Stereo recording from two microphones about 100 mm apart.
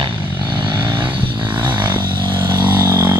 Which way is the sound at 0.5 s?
45° right (ahead or behind).